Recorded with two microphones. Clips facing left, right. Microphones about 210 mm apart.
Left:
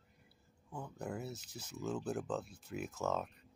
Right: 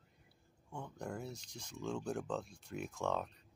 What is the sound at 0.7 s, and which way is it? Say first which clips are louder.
Speech: left 1 dB; 5° left (ahead or behind).